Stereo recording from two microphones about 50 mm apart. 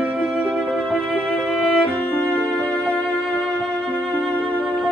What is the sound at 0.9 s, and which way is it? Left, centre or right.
Music, left.